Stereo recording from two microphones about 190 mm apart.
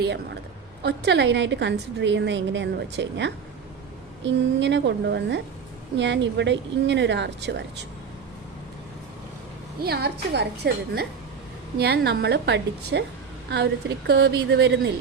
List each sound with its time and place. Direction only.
0.0 s a woman's voice: 65° right (ahead or behind)
9.8 s a woman's voice: 60° right (ahead or behind)